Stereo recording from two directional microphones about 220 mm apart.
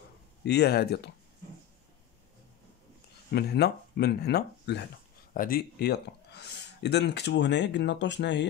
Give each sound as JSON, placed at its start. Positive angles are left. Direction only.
{"t": 0.5, "sound": "speech", "side_deg": 45}
{"t": 3.3, "sound": "speech", "side_deg": 45}